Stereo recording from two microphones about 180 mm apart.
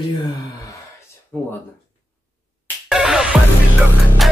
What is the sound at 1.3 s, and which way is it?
Speech, 5° left (ahead or behind).